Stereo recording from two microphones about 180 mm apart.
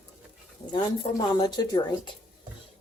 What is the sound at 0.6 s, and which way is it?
Speech, 25° left (ahead or behind).